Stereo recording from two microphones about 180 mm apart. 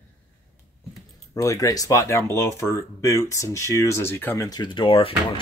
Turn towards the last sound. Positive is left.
turn(degrees=30)  # may be behind; listen again after turning